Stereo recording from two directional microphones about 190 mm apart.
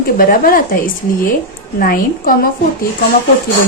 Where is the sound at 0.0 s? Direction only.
50° left (ahead or behind).